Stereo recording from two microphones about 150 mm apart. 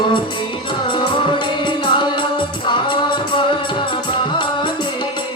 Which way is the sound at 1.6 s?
30° left (ahead or behind).